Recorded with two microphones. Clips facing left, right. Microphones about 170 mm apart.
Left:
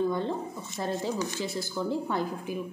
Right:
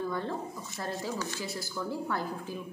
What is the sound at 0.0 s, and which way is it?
A woman's voice, 20° left (ahead or behind).